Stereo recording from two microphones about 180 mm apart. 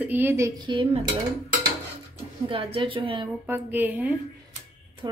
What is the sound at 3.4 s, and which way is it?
Speech, 10° right (ahead or behind).